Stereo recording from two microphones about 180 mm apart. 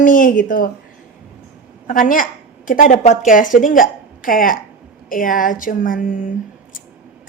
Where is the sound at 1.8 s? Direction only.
50° left (ahead or behind).